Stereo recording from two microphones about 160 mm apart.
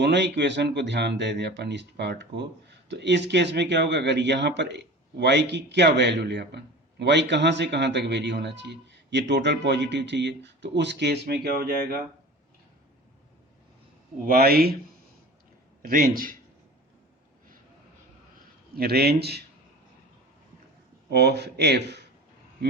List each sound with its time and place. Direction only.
0.0 s speech: 90° right
14.3 s speech: 70° right (ahead or behind)
15.8 s a man's voice: 60° right (ahead or behind)
18.8 s a man's voice: 80° right
21.1 s speech: 90° right